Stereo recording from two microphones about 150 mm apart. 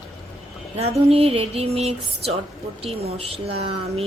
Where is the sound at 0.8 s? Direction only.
40° right (ahead or behind).